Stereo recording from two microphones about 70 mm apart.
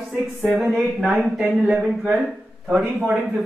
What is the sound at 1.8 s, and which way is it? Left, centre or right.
A man's voice, centre.